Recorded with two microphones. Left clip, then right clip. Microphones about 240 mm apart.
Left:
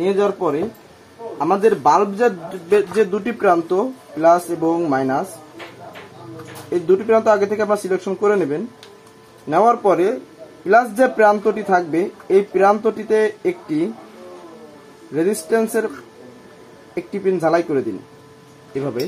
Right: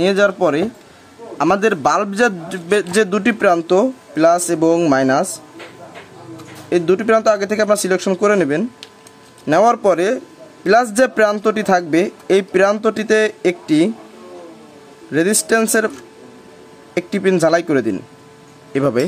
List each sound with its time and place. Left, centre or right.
0.0 s speech: right
6.7 s speech: right
15.1 s speech: right
16.9 s speech: right